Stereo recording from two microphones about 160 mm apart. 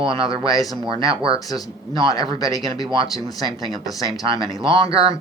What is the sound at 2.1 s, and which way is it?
Speech, 25° left (ahead or behind).